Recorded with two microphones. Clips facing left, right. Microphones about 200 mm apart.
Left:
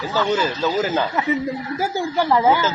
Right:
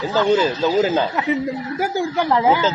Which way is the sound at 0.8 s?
25° right (ahead or behind).